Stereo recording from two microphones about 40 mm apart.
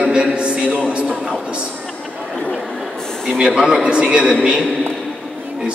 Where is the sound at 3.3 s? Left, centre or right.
Centre.